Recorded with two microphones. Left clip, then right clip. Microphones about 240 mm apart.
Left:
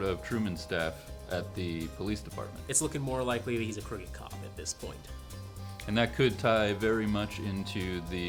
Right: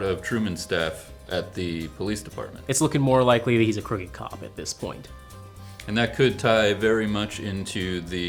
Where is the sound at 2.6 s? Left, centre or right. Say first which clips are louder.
Right 12 dB; right.